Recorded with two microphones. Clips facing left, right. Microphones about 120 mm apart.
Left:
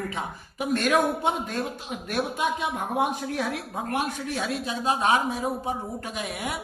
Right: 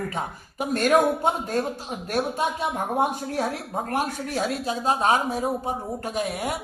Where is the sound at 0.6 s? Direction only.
40° right (ahead or behind).